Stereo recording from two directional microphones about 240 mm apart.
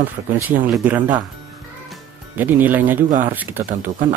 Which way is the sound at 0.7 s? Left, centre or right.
Centre.